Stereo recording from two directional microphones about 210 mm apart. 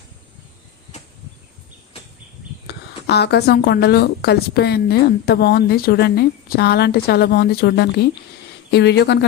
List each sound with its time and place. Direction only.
2.6 s a woman's voice: 50° left (ahead or behind)